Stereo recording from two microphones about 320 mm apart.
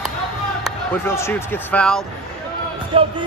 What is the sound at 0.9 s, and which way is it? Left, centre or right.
Speech, centre.